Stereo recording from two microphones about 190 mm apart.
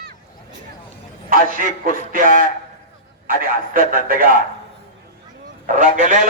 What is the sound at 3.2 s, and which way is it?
A man's voice, 50° right (ahead or behind).